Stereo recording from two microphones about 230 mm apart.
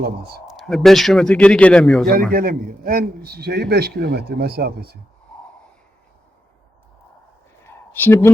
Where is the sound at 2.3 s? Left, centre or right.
Right.